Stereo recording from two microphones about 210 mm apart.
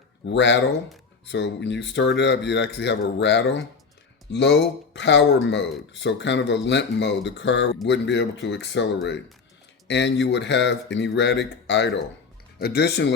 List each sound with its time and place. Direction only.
0.3 s speech: 55° left (ahead or behind)